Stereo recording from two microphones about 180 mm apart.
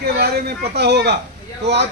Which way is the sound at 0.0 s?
60° right (ahead or behind).